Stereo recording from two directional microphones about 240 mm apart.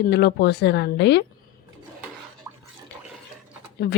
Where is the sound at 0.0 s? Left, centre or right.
Left.